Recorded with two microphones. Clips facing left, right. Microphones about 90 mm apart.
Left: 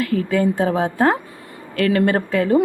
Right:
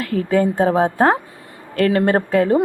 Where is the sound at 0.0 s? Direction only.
40° right (ahead or behind).